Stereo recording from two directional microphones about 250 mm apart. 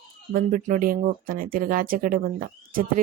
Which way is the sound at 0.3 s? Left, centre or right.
Right.